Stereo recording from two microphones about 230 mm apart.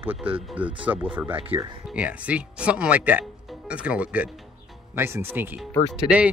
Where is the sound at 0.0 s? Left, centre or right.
Centre.